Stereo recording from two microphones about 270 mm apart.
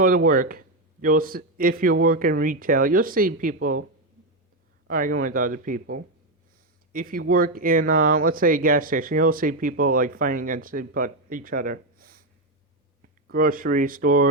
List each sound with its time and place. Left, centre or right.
0.0 s speech: right
4.9 s speech: right
13.3 s speech: right